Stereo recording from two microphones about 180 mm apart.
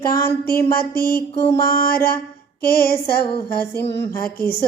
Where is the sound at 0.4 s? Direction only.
55° left (ahead or behind).